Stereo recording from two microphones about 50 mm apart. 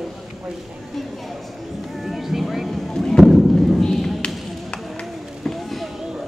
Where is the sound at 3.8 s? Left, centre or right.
Centre.